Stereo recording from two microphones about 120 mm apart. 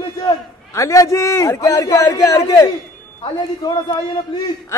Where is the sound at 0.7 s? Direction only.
25° left (ahead or behind).